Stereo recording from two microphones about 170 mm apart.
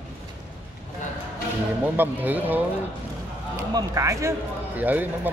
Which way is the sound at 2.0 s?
10° right (ahead or behind).